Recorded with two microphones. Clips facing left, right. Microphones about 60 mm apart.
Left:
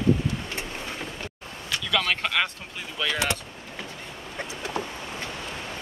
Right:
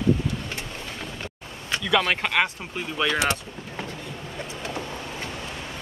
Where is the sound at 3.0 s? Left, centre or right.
Right.